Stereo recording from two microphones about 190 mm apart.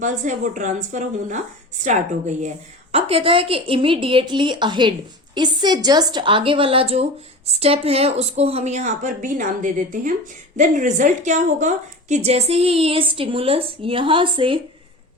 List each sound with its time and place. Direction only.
0.0 s a woman's voice: 40° right (ahead or behind)